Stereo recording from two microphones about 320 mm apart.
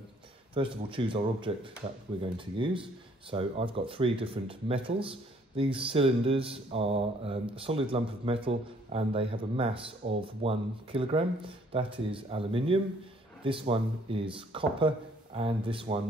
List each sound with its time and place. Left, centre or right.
0.6 s speech: centre